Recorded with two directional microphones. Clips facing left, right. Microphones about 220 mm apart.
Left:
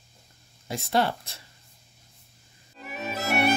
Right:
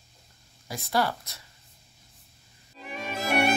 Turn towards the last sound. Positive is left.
turn(degrees=5)  # may be behind; listen again after turning